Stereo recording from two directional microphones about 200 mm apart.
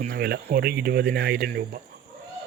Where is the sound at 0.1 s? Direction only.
55° right (ahead or behind).